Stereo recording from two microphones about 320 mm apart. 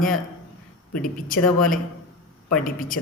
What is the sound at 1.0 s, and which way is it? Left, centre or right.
Speech, left.